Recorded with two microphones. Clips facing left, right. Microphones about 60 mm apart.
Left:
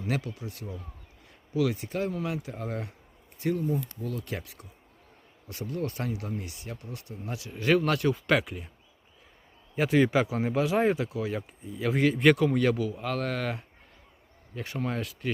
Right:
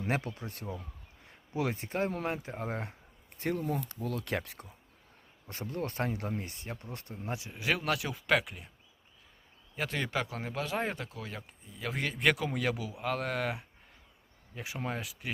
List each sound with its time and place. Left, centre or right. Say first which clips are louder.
0.0 s speech: left 1 dB; right
3.3 s speech: left 4 dB; right
5.5 s speech: left 4 dB; right
7.6 s speech: left 8 dB; centre
9.7 s speech: left 10 dB; centre